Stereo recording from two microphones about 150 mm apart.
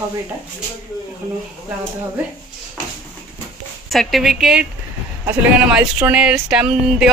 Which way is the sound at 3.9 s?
Centre (ahead or behind).